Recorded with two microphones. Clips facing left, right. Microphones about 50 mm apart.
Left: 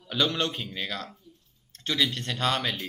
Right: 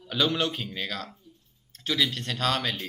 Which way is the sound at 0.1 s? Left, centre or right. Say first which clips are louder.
Right 1 dB; centre.